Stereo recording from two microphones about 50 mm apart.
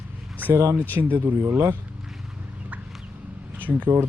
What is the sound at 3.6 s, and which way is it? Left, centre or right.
Speech, right.